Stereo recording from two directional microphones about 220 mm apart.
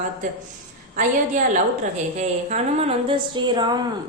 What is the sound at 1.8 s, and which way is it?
A woman's voice, 30° right (ahead or behind).